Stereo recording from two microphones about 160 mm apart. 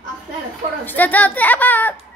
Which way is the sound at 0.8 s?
10° left (ahead or behind).